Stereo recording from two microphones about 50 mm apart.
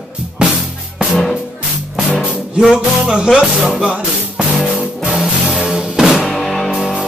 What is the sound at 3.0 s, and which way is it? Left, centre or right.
Music, centre.